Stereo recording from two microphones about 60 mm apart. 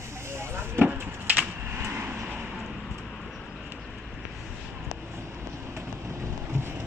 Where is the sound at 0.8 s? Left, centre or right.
Right.